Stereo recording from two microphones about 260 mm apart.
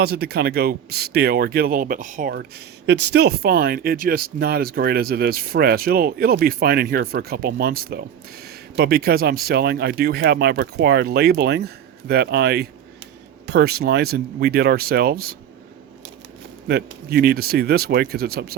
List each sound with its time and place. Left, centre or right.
0.0 s speech: right
16.6 s speech: right